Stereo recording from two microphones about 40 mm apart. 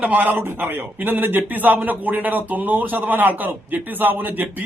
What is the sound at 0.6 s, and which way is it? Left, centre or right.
A man's voice, right.